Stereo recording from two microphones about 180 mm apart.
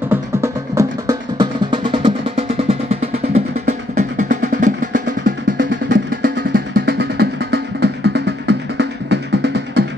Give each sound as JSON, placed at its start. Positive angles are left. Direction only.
{"t": 0.1, "sound": "music", "side_deg": -15}